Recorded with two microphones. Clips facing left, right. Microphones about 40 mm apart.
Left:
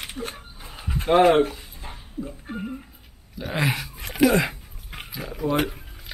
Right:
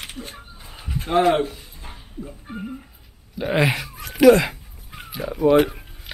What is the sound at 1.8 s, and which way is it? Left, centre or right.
Speech, centre.